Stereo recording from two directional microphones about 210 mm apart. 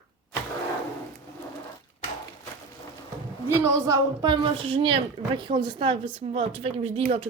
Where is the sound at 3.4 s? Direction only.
15° right (ahead or behind).